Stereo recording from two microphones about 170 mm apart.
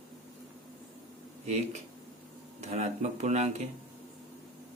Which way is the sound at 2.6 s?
40° right (ahead or behind).